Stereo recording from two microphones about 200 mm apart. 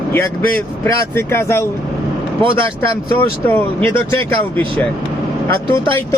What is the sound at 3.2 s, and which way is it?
Speech, 10° left (ahead or behind).